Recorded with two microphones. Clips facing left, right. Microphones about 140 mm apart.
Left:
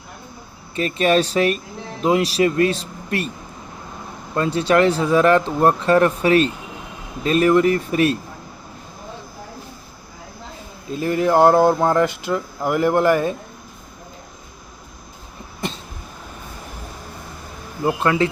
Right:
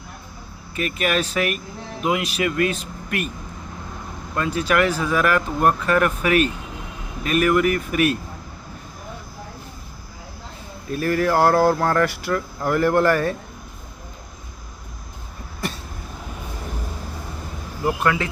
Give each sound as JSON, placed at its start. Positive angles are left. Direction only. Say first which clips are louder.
{"t": 0.8, "sound": "speech", "louder": "left 5 dB", "side_deg": 30}
{"t": 4.4, "sound": "speech", "louder": "left 4 dB", "side_deg": 30}
{"t": 10.8, "sound": "speech", "louder": "left 1 dB", "side_deg": 20}
{"t": 17.8, "sound": "speech", "louder": "left 3 dB", "side_deg": 30}